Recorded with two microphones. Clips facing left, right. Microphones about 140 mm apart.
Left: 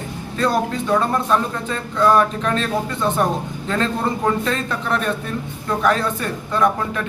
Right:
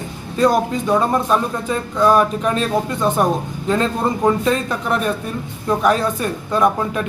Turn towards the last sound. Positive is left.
turn(degrees=-20)  # may be behind; listen again after turning